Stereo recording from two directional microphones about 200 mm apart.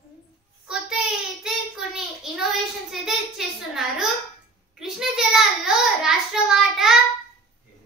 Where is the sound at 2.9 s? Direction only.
Centre (ahead or behind).